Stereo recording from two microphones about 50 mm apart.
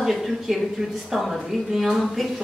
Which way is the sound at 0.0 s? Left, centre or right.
Centre.